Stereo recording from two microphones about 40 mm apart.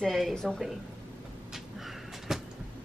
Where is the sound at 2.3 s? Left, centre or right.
Centre.